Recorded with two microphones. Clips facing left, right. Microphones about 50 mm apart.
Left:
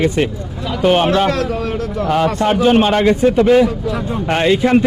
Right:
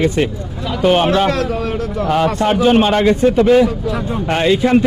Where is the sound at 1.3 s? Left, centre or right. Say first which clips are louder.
Even; right.